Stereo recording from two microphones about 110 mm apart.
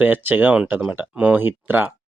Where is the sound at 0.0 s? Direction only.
20° right (ahead or behind).